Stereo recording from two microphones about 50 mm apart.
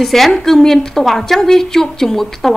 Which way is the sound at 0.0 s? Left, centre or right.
Centre.